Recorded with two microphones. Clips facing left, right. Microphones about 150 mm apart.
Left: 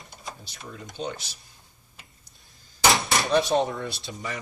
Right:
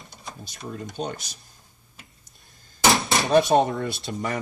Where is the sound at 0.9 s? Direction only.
50° right (ahead or behind).